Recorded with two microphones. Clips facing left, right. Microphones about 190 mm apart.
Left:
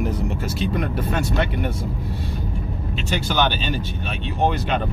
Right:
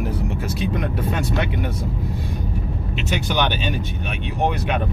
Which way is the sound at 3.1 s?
15° right (ahead or behind).